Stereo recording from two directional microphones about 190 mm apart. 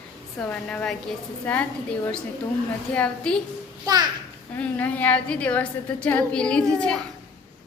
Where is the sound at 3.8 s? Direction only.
20° right (ahead or behind).